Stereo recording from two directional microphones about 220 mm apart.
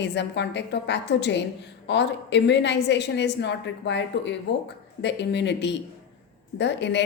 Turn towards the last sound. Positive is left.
turn(degrees=50)  # may be behind; listen again after turning